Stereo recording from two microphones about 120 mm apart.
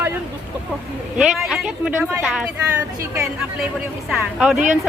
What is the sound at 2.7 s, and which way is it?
Speech, 25° right (ahead or behind).